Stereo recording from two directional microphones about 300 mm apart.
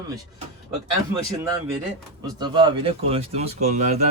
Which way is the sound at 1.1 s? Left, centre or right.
Centre.